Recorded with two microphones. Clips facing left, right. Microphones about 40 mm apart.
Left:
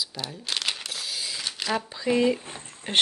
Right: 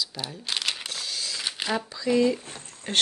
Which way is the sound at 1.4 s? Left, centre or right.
Right.